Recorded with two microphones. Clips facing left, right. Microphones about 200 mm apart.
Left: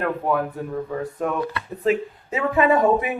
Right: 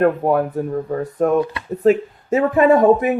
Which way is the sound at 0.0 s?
45° right (ahead or behind).